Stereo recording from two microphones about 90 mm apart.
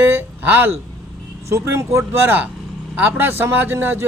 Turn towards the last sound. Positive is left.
turn(degrees=-25)  # may be behind; listen again after turning